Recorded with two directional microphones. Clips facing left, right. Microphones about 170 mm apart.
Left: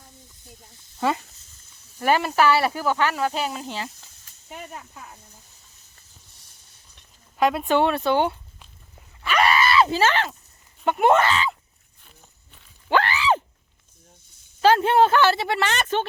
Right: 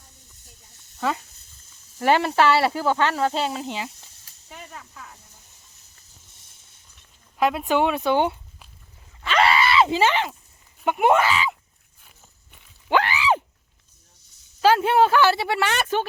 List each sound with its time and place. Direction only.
0.9 s speech: 5° left (ahead or behind)
2.0 s speech: 25° right (ahead or behind)
4.4 s speech: 20° left (ahead or behind)
7.3 s speech: 5° right (ahead or behind)
9.2 s groan: 25° right (ahead or behind)
10.8 s speech: 10° right (ahead or behind)
12.5 s a sound: 15° right (ahead or behind)
14.6 s speech: 5° right (ahead or behind)